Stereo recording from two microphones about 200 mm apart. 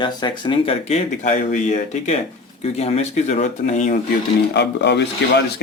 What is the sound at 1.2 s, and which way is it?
Speech, 40° left (ahead or behind).